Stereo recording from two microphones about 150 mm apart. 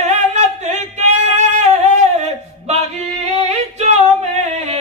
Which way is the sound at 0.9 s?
50° right (ahead or behind).